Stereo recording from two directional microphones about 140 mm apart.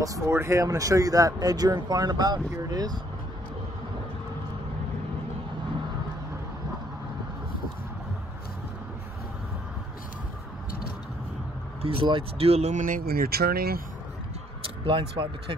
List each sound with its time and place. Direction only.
0.0 s speech: 20° right (ahead or behind)
11.8 s speech: 40° right (ahead or behind)
12.8 s speech: 85° right
14.9 s speech: 40° right (ahead or behind)